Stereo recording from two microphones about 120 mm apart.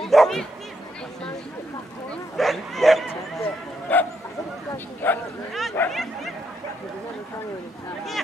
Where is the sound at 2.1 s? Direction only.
Centre (ahead or behind).